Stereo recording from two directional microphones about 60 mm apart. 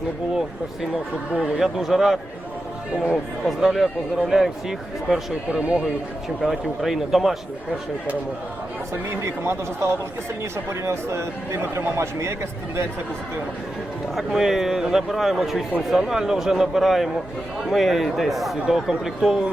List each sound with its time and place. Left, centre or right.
1.5 s a man's voice: centre
3.4 s speech: centre
6.4 s a man's voice: centre
9.0 s a man's voice: right
14.2 s a man's voice: centre